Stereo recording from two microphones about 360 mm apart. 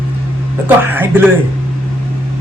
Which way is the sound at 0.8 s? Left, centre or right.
Centre.